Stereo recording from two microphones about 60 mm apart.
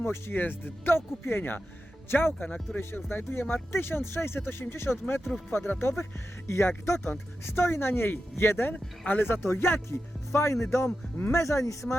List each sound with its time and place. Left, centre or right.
0.0 s speech: left